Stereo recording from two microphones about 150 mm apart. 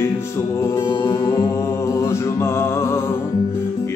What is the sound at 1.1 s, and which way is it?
Mantra, 20° left (ahead or behind).